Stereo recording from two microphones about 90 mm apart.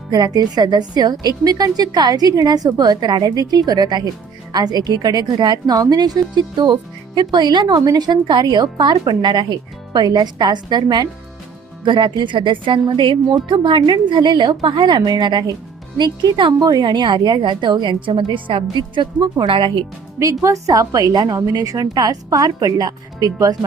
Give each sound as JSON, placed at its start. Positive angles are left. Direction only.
{"t": 0.1, "sound": "a woman's voice", "side_deg": -45}
{"t": 20.4, "sound": "a woman's voice", "side_deg": -40}